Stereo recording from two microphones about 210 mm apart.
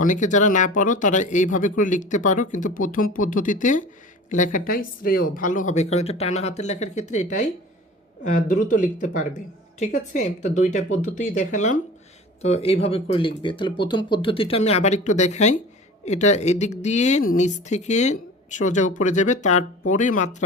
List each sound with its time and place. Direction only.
0.0 s speech: 35° left (ahead or behind)